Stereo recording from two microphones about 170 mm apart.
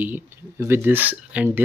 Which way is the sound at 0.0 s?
10° right (ahead or behind).